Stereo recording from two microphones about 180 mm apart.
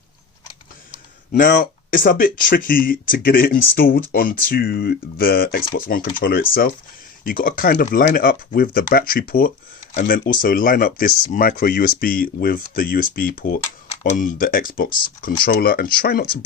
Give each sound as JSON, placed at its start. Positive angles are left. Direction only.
{"t": 0.9, "sound": "typing", "side_deg": 45}
{"t": 1.5, "sound": "speech", "side_deg": 50}